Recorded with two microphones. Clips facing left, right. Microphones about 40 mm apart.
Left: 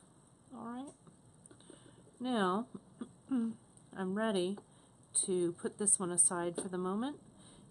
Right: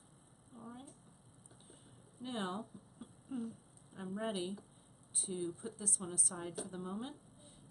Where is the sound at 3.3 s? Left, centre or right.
Centre.